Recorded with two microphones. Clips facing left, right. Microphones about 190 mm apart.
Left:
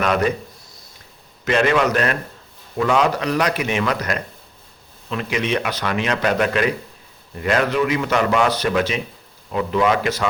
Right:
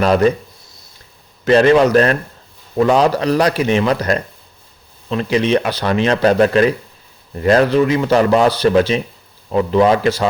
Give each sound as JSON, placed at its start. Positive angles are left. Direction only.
{"t": 0.0, "sound": "speech", "side_deg": -30}
{"t": 1.5, "sound": "speech", "side_deg": -35}